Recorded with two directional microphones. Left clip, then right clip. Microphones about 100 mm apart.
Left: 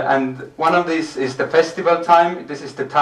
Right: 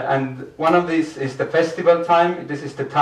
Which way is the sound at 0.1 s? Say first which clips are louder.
Left 3 dB; 35° left (ahead or behind).